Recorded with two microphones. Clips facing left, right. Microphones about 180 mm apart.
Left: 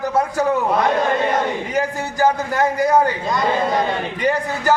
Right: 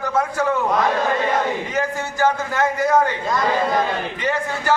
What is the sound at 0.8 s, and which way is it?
A man's voice, 20° left (ahead or behind).